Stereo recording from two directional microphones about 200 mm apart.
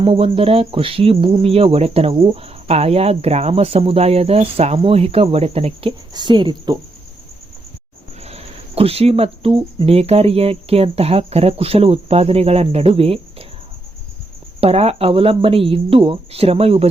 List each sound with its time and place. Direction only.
0.0 s cricket: 30° right (ahead or behind)
8.2 s cricket: 30° right (ahead or behind)
14.6 s cricket: 30° right (ahead or behind)